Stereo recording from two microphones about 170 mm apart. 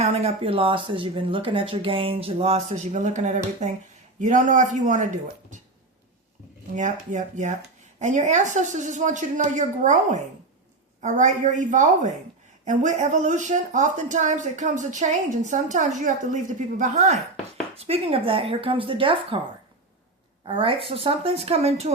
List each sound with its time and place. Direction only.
0.0 s speech: 40° right (ahead or behind)
6.7 s speech: 45° right (ahead or behind)
20.5 s speech: 30° right (ahead or behind)